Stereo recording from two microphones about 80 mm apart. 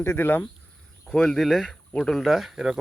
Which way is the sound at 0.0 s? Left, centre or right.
Left.